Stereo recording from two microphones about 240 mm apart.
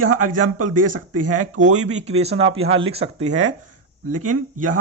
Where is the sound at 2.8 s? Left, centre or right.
Right.